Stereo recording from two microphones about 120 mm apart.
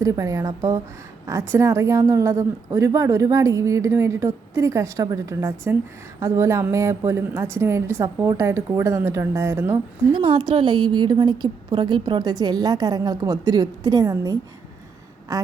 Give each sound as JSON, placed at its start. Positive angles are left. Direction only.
{"t": 0.0, "sound": "a woman's voice", "side_deg": -25}
{"t": 10.2, "sound": "a woman's voice", "side_deg": -45}